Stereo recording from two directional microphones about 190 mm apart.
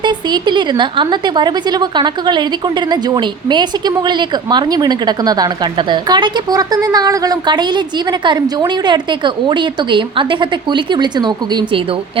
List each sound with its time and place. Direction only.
0.0 s a woman's voice: 20° right (ahead or behind)